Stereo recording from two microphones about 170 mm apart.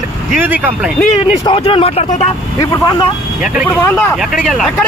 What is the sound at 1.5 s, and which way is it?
Speech, 30° left (ahead or behind).